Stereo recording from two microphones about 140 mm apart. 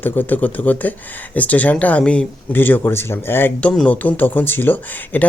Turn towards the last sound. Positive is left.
turn(degrees=15)  # may be behind; listen again after turning